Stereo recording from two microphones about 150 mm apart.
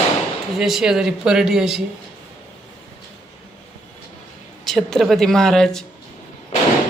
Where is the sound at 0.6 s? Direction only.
5° right (ahead or behind).